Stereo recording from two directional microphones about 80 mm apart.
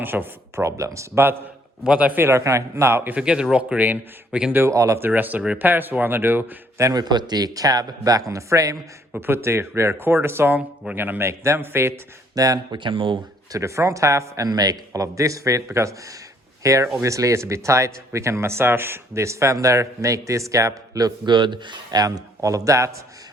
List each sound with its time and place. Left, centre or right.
0.0 s speech: right
1.8 s speech: centre; by 3.2 s right
3.2 s speech: centre
4.7 s speech: right
4.9 s speech: right
6.9 s speech: right
9.2 s speech: right
12.3 s speech: right
12.7 s speech: right
13.5 s speech: right
21.2 s speech: right
22.0 s speech: right